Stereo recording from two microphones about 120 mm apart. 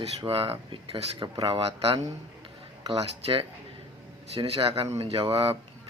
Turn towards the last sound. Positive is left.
turn(degrees=-50)  # may be behind; listen again after turning